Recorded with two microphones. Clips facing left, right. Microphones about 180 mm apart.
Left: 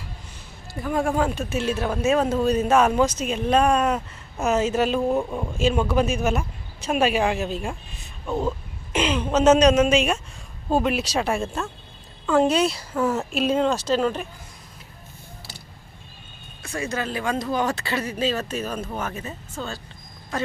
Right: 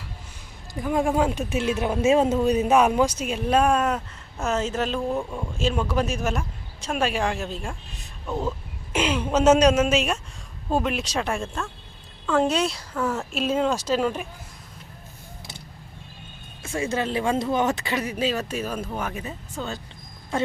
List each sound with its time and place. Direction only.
0.7 s speech: 15° right (ahead or behind); by 4.0 s centre (ahead or behind)
4.4 s speech: 10° left (ahead or behind)
5.5 s a woman's voice: 5° left (ahead or behind)
8.9 s a woman's voice: 10° right (ahead or behind)
16.6 s speech: 25° right (ahead or behind)